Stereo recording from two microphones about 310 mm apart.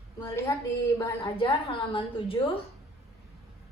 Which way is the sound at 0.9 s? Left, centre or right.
Centre.